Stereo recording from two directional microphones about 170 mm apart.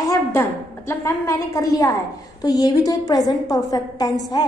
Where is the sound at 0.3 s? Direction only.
15° left (ahead or behind).